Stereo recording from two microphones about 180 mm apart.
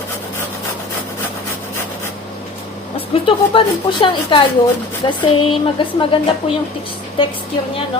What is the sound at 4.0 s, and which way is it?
Speech, 30° left (ahead or behind).